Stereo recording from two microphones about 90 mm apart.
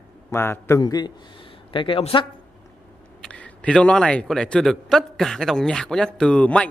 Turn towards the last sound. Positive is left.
turn(degrees=10)  # may be behind; listen again after turning